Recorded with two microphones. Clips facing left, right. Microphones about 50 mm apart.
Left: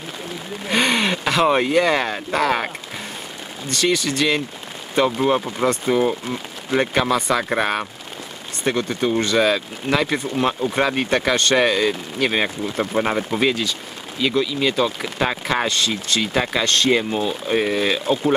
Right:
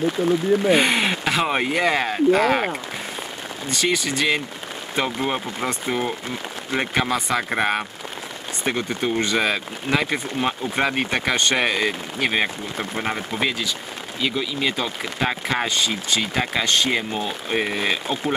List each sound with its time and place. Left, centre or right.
0.7 s speech: centre
12.9 s speech: centre
13.4 s speech: centre